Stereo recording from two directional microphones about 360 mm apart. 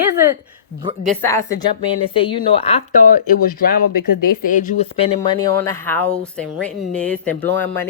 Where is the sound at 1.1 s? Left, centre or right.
Centre.